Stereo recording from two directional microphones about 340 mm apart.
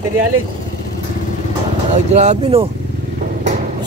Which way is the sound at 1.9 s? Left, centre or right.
Centre.